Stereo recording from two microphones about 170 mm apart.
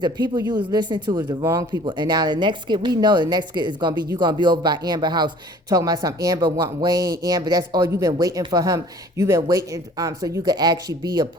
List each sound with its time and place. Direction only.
0.0 s speech: 25° right (ahead or behind)